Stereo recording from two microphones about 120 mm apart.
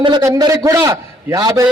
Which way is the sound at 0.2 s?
30° right (ahead or behind).